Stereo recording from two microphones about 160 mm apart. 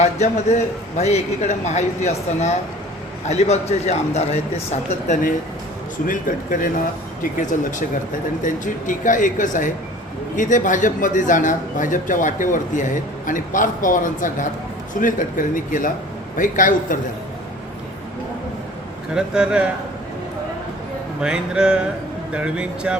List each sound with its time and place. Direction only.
0.0 s speech: 45° left (ahead or behind)
19.1 s speech: 5° right (ahead or behind)
21.2 s speech: 5° right (ahead or behind)